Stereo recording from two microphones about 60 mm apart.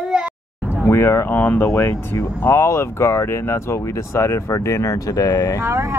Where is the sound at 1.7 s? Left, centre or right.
Left.